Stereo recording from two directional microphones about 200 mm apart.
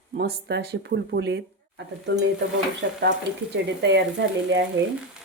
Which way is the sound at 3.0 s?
60° right (ahead or behind).